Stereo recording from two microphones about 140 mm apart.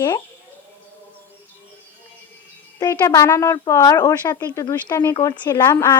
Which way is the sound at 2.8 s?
25° left (ahead or behind).